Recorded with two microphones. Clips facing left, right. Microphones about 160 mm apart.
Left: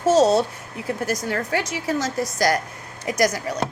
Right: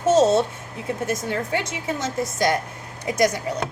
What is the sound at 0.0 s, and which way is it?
A woman's voice, 20° right (ahead or behind).